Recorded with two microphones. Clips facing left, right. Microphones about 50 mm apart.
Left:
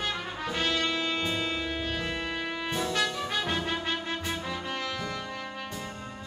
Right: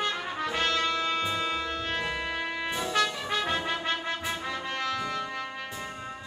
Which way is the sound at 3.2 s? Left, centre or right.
Centre.